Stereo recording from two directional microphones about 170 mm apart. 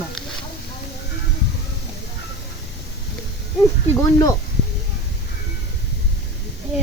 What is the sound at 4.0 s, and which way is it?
Speech, 20° left (ahead or behind).